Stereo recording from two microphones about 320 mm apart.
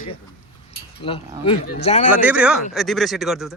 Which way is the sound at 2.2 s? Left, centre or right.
Centre.